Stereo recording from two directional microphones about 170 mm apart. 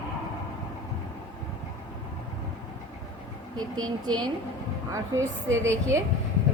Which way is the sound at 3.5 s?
25° right (ahead or behind).